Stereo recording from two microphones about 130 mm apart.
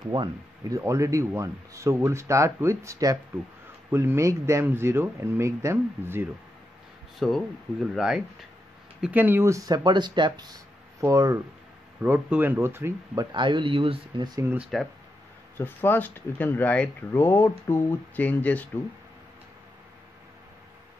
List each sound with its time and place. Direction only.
0.1 s speech: 35° right (ahead or behind)
0.7 s speech: 20° right (ahead or behind)
7.2 s speech: centre (ahead or behind)
9.1 s speech: 15° right (ahead or behind)
12.0 s speech: 15° right (ahead or behind); by 14.4 s 35° right (ahead or behind)
14.4 s speech: 15° right (ahead or behind)
15.5 s speech: 15° left (ahead or behind)